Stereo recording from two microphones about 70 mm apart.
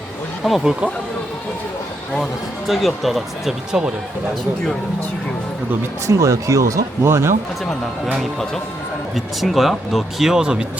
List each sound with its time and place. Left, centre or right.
0.4 s speech: centre
2.6 s speech: centre
6.1 s speech: right
7.6 s speech: centre